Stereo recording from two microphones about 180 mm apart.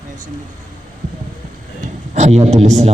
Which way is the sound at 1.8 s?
40° right (ahead or behind).